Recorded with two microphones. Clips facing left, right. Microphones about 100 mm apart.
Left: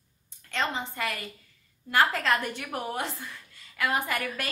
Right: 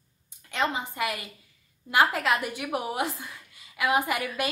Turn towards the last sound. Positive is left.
turn(degrees=-15)  # may be behind; listen again after turning